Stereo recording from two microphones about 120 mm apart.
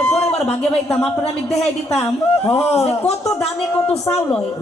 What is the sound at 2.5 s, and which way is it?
Speech, 60° left (ahead or behind).